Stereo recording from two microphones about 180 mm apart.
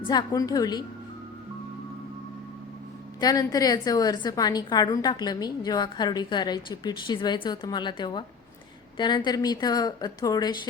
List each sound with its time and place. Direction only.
0.1 s a woman's voice: 20° left (ahead or behind)
3.2 s a woman's voice: 20° left (ahead or behind)